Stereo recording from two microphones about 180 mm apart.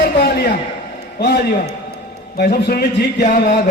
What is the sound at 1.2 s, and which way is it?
A man's voice, 60° left (ahead or behind).